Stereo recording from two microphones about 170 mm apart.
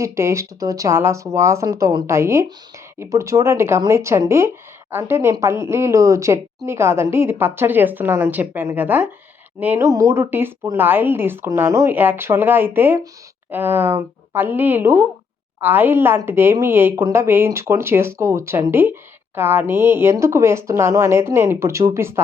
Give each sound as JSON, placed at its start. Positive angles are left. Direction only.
{"t": 0.0, "sound": "speech", "side_deg": -15}